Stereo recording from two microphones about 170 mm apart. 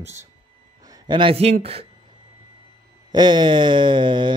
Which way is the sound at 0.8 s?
25° right (ahead or behind).